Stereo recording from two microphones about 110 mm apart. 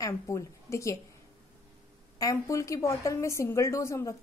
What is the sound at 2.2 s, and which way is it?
A woman's voice, 30° left (ahead or behind).